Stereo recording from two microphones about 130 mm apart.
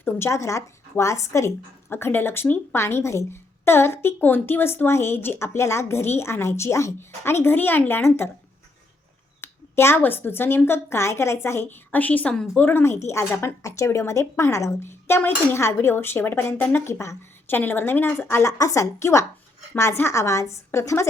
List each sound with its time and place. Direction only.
0.0 s speech: 20° left (ahead or behind)
9.4 s a woman's voice: 20° left (ahead or behind)